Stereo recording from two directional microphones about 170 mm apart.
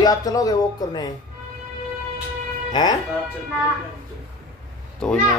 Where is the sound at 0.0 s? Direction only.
20° left (ahead or behind).